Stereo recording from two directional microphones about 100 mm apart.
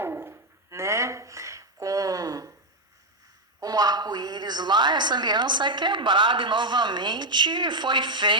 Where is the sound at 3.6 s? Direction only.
40° right (ahead or behind).